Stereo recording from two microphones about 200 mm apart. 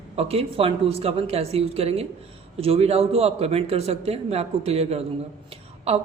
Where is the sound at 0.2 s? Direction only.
30° right (ahead or behind).